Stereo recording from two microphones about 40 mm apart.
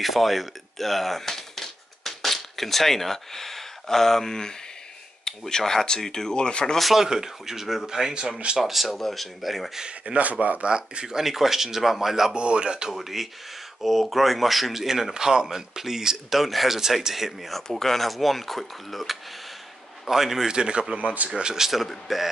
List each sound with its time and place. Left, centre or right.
0.0 s speech: centre; by 6.6 s left
6.8 s speech: centre
8.5 s speech: centre
9.8 s speech: right
10.7 s speech: centre
12.4 s speech: right
12.9 s speech: centre
20.5 s speech: right
20.9 s speech: right
21.4 s speech: centre
21.8 s speech: centre